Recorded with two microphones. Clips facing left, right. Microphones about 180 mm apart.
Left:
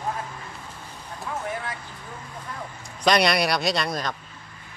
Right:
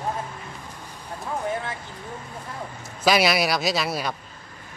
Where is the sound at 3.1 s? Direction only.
5° right (ahead or behind).